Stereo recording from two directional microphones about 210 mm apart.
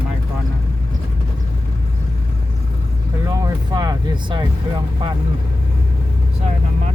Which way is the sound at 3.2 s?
15° right (ahead or behind).